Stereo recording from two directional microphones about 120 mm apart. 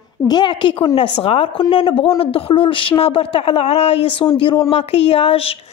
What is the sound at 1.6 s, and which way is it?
Speech, 40° left (ahead or behind).